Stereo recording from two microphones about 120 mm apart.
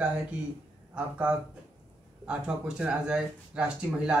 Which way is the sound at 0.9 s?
10° right (ahead or behind).